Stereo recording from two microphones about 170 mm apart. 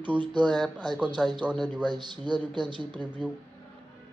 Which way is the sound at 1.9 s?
25° right (ahead or behind).